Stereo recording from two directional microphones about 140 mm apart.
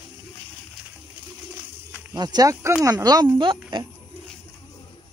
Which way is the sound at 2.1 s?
30° right (ahead or behind).